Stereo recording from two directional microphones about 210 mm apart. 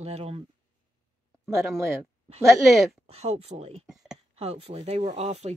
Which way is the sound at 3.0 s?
30° right (ahead or behind).